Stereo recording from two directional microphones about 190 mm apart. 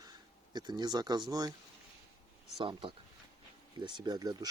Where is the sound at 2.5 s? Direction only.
25° right (ahead or behind).